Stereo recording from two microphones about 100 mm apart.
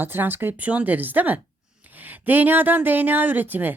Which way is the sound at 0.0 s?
20° right (ahead or behind).